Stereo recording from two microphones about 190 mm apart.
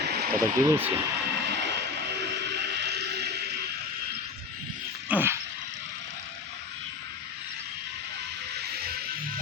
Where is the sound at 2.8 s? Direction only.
60° right (ahead or behind).